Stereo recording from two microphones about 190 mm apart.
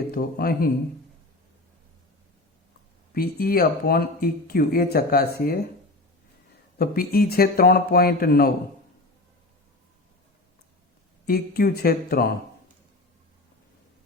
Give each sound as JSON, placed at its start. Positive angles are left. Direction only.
{"t": 0.1, "sound": "speech", "side_deg": 55}
{"t": 3.2, "sound": "speech", "side_deg": 50}
{"t": 6.7, "sound": "speech", "side_deg": 55}
{"t": 11.3, "sound": "speech", "side_deg": 55}